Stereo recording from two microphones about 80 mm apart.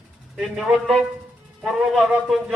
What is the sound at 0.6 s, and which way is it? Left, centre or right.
Speech, centre.